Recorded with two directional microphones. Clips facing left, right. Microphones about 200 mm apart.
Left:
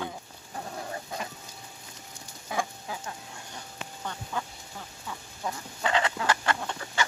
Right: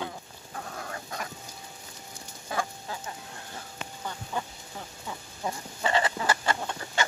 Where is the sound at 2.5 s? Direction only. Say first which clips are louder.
Even; 15° left (ahead or behind).